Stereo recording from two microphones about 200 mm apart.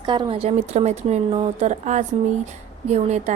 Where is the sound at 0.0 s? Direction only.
20° right (ahead or behind).